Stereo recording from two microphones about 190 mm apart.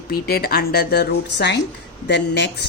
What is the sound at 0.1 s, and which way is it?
Speech, 55° left (ahead or behind).